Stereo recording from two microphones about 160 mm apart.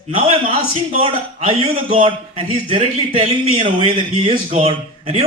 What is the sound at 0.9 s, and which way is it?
A man's voice, 40° right (ahead or behind).